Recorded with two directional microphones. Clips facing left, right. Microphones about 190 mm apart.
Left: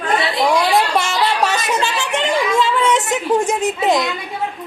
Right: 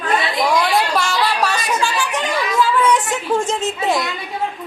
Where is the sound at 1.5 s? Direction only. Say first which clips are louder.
Left 1 dB; 25° left (ahead or behind).